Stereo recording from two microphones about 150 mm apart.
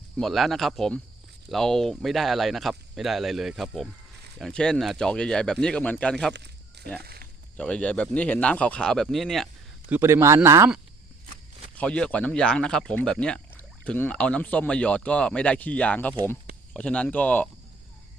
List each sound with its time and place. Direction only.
0.2 s speech: centre (ahead or behind)
7.0 s a sound: 90° right
7.5 s speech: 5° left (ahead or behind)
9.9 s speech: 15° right (ahead or behind)
11.8 s speech: 5° left (ahead or behind)